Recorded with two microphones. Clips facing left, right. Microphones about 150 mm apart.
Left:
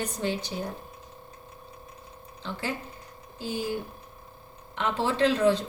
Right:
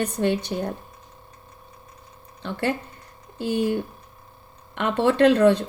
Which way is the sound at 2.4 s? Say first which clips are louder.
Right 7 dB; 60° right (ahead or behind).